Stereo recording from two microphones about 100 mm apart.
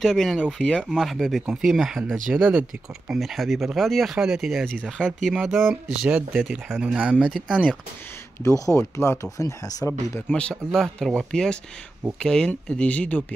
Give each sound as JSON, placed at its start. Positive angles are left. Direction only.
{"t": 0.0, "sound": "speech", "side_deg": 0}
{"t": 2.3, "sound": "speech", "side_deg": -15}
{"t": 3.1, "sound": "speech", "side_deg": 0}
{"t": 8.5, "sound": "speech", "side_deg": 35}
{"t": 10.3, "sound": "speech", "side_deg": 5}